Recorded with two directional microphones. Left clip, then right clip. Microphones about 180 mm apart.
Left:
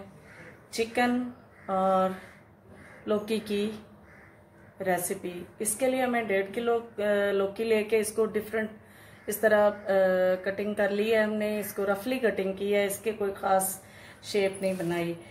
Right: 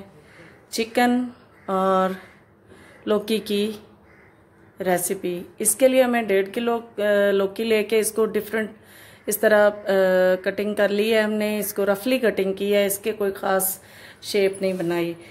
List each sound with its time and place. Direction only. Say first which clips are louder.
0.7 s speech: right 6 dB; 60° right (ahead or behind)
1.7 s a sound: right 5 dB; 55° right (ahead or behind)
3.1 s speech: right 7 dB; 55° right (ahead or behind)
4.7 s speech: right 6 dB; 55° right (ahead or behind)